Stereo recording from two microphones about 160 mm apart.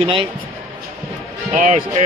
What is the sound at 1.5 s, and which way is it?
Speech, 50° right (ahead or behind).